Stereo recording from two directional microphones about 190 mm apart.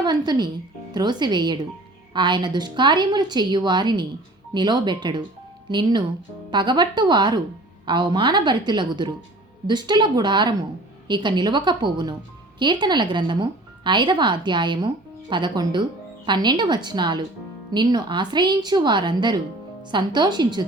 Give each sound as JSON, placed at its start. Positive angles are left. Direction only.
{"t": 0.0, "sound": "speech", "side_deg": -20}